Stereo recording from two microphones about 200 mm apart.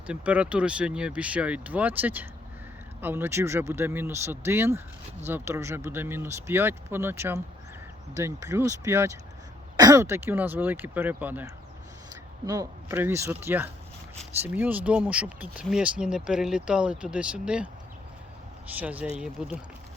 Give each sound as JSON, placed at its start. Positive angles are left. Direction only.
{"t": 0.1, "sound": "speech", "side_deg": -5}
{"t": 18.8, "sound": "speech", "side_deg": -5}